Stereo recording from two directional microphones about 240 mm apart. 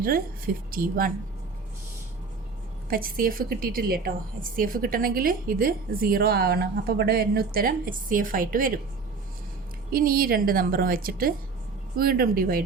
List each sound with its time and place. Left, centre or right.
0.0 s a woman's voice: right
2.9 s a woman's voice: right
9.9 s a woman's voice: right